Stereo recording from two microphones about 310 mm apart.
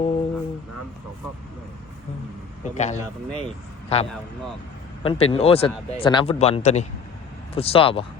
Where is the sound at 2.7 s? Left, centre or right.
Left.